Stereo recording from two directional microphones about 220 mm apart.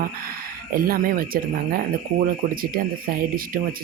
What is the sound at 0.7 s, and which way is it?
Speech, 40° right (ahead or behind).